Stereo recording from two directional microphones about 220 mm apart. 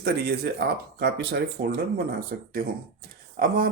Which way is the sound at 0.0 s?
50° right (ahead or behind).